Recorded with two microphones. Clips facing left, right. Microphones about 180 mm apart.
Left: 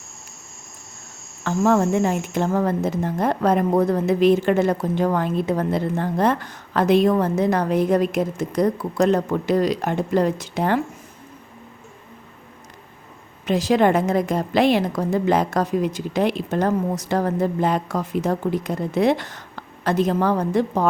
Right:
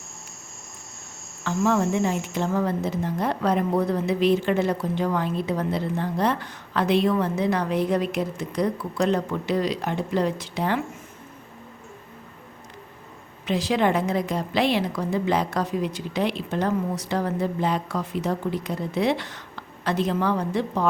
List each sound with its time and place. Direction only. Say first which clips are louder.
1.5 s cricket: left 4 dB; centre (ahead or behind)
2.5 s a woman's voice: left 3 dB; 45° left (ahead or behind)
13.4 s a woman's voice: left 5 dB; 45° left (ahead or behind)